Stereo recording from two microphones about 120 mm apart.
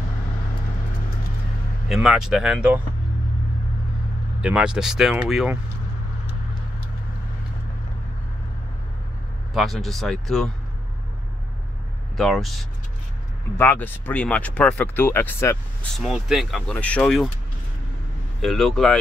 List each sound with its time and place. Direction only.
1.9 s speech: 5° right (ahead or behind)
4.4 s speech: 5° right (ahead or behind)
9.5 s speech: centre (ahead or behind)
12.2 s speech: centre (ahead or behind)
13.6 s speech: 15° left (ahead or behind)
16.0 s speech: centre (ahead or behind)
16.7 s speech: 10° left (ahead or behind)
18.4 s speech: centre (ahead or behind)